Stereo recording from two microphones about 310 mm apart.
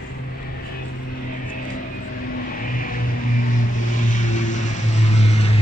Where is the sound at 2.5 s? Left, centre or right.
Left.